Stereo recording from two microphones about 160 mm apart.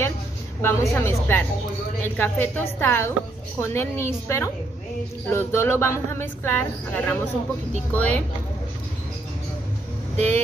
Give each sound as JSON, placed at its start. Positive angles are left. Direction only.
{"t": 0.6, "sound": "a woman's voice", "side_deg": 15}
{"t": 10.1, "sound": "speech", "side_deg": -45}